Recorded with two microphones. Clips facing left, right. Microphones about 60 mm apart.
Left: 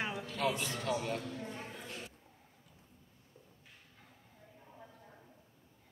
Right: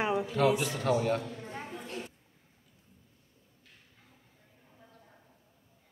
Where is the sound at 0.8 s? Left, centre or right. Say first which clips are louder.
Right 8 dB; right.